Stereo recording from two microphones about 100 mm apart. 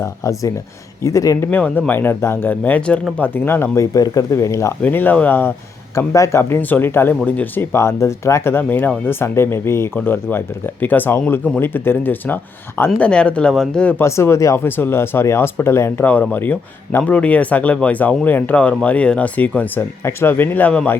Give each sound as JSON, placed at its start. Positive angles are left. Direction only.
{"t": 0.0, "sound": "speech", "side_deg": 35}
{"t": 1.5, "sound": "speech", "side_deg": 15}
{"t": 3.9, "sound": "speech", "side_deg": 35}
{"t": 4.8, "sound": "speech", "side_deg": 20}
{"t": 6.6, "sound": "speech", "side_deg": 20}
{"t": 14.0, "sound": "speech", "side_deg": 25}